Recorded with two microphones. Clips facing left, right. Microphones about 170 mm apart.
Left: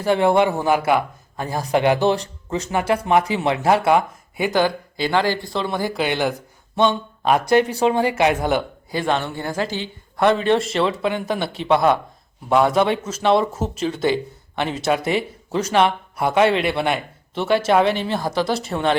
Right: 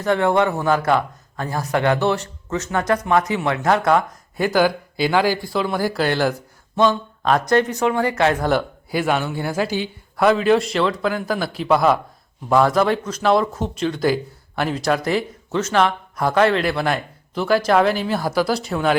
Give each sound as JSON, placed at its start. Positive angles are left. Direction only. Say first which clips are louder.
{"t": 0.1, "sound": "speech", "louder": "left 1 dB", "side_deg": 20}
{"t": 3.2, "sound": "speech", "louder": "left 1 dB", "side_deg": 30}
{"t": 3.8, "sound": "speech", "louder": "even", "side_deg": 10}
{"t": 4.6, "sound": "speech", "louder": "right 2 dB", "side_deg": -10}
{"t": 6.8, "sound": "speech", "louder": "right 1 dB", "side_deg": 20}
{"t": 7.8, "sound": "speech", "louder": "left 1 dB", "side_deg": 20}
{"t": 8.9, "sound": "speech", "louder": "right 1 dB", "side_deg": -10}